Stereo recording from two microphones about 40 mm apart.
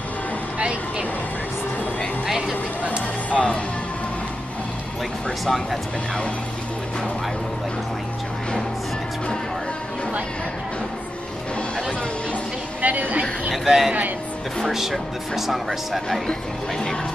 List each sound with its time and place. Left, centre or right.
0.6 s vehicle: right
2.2 s vehicle: centre
3.3 s speech: left
5.4 s speech: centre
12.8 s a woman's voice: right
13.5 s speech: centre